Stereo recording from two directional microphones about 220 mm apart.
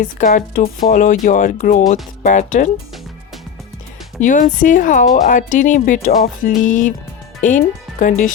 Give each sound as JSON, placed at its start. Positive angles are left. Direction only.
{"t": 0.0, "sound": "speech", "side_deg": 35}
{"t": 4.2, "sound": "speech", "side_deg": 35}